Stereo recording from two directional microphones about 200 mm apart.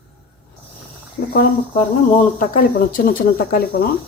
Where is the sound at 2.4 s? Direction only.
45° left (ahead or behind).